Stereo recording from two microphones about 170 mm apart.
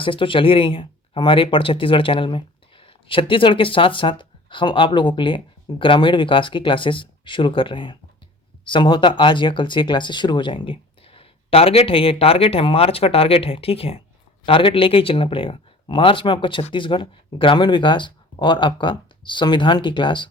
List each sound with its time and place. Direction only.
0.0 s speech: 30° left (ahead or behind)